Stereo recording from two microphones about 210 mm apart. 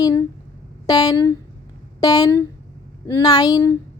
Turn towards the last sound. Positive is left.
turn(degrees=15)  # may be behind; listen again after turning